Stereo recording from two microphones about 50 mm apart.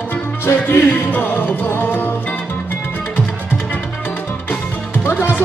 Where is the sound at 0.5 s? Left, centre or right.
Left.